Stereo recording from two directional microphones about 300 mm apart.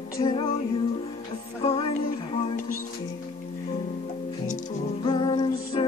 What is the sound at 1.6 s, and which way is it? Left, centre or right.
Music, centre.